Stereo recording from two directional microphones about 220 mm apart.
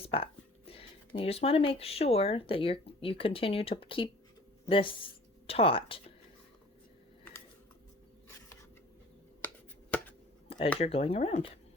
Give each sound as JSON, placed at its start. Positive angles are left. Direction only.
{"t": 0.1, "sound": "speech", "side_deg": 25}
{"t": 10.8, "sound": "speech", "side_deg": 25}